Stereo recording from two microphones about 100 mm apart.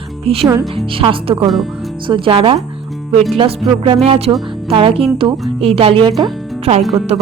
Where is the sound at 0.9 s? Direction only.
65° right (ahead or behind).